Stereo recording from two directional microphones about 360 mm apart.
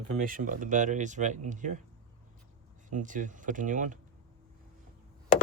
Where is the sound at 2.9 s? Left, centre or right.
Right.